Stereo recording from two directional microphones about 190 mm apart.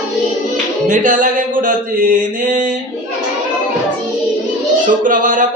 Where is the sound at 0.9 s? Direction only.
45° right (ahead or behind).